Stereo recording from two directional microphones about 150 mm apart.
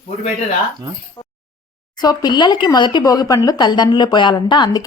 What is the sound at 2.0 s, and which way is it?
Speech, 25° left (ahead or behind).